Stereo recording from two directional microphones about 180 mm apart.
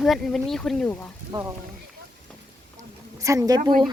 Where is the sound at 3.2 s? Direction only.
20° right (ahead or behind).